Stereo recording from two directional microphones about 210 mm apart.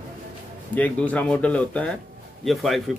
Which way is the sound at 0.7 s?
5° left (ahead or behind).